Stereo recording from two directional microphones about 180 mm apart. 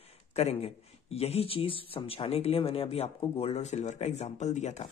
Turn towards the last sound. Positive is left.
turn(degrees=40)  # may be behind; listen again after turning